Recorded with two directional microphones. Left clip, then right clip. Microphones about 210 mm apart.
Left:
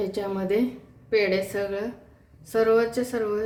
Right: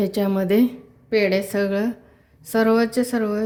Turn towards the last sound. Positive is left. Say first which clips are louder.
# right 3 dB
turn(degrees=-50)  # may be behind; listen again after turning